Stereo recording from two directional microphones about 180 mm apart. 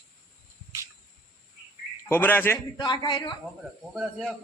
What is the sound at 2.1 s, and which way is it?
Speech, 10° left (ahead or behind).